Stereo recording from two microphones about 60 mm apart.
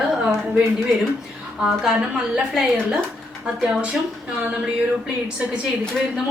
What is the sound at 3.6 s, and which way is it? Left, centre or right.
Speech, centre.